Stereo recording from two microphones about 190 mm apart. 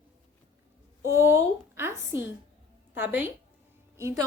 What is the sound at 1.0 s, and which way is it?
A woman's voice, 15° right (ahead or behind).